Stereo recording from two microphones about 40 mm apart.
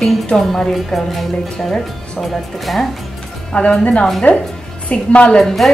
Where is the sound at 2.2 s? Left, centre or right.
Centre.